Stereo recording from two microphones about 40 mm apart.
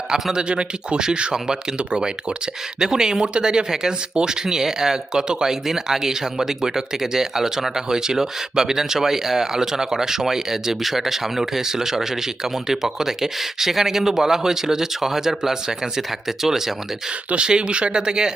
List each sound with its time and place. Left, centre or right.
0.1 s speech: centre
17.3 s speech: right